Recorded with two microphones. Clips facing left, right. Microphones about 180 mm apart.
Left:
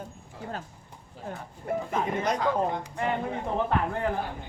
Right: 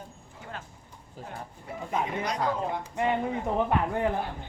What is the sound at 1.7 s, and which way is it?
Speech, 55° left (ahead or behind).